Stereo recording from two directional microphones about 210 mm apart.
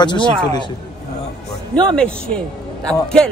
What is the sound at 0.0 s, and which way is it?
Speech, 20° left (ahead or behind).